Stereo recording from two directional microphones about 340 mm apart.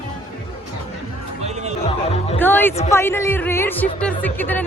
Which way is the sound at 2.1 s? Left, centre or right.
Centre.